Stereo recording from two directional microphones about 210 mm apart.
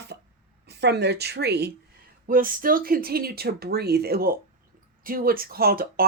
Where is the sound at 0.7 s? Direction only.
55° right (ahead or behind).